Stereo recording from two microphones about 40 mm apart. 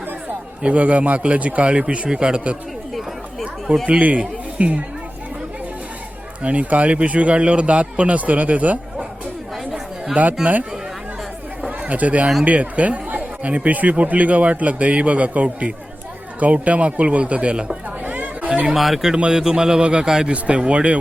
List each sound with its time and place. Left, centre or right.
0.6 s speech: right
3.8 s a man's voice: right
6.4 s speech: right
10.2 s speech: right
11.9 s speech: right
18.0 s chatter: right
18.6 s speech: centre
19.1 s speech: right
19.4 s speech: centre